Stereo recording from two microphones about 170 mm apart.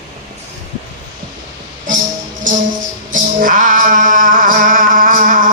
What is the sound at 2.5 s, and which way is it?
Music, 50° right (ahead or behind).